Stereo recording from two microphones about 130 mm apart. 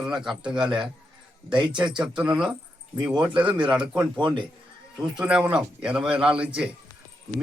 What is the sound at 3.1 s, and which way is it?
Speech, 5° right (ahead or behind).